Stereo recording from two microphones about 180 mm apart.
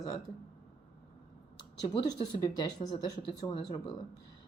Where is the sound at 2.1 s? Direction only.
20° left (ahead or behind).